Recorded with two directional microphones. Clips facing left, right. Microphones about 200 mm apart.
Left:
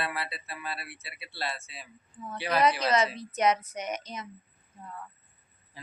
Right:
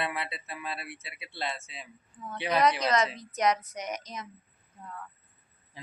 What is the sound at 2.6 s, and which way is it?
A woman's voice, 5° left (ahead or behind).